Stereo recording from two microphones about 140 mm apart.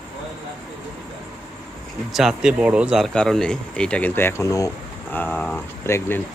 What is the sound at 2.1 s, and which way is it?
Speech, centre (ahead or behind).